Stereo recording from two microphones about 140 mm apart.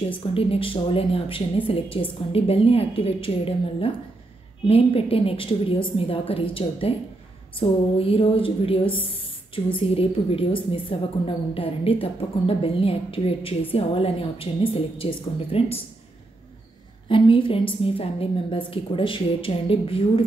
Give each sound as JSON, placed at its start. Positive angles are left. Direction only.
{"t": 0.2, "sound": "a woman's voice", "side_deg": 40}
{"t": 17.1, "sound": "a woman's voice", "side_deg": 40}